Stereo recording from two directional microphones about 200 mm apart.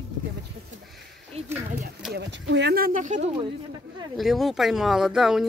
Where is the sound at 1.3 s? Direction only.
30° right (ahead or behind).